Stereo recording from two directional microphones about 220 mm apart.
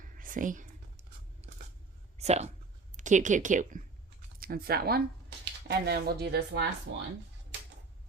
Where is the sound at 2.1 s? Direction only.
30° right (ahead or behind).